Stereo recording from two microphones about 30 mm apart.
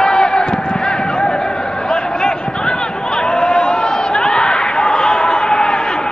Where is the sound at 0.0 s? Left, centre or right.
Left.